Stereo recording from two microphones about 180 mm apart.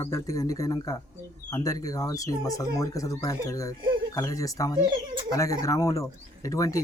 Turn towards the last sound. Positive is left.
turn(degrees=20)  # may be behind; listen again after turning